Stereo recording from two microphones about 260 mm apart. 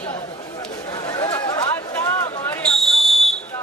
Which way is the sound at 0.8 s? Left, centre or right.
Centre.